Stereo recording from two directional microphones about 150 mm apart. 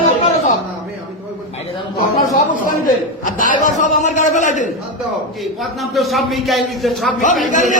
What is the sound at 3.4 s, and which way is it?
A man's voice, 60° left (ahead or behind).